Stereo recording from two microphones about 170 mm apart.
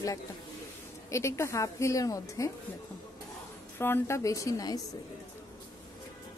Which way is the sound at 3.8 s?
15° left (ahead or behind).